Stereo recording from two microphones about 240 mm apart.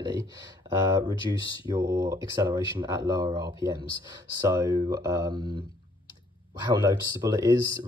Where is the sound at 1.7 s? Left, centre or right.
Centre.